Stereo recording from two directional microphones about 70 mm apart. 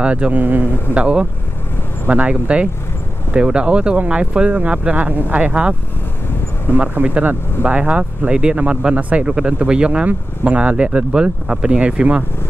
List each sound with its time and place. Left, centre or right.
0.0 s speech: centre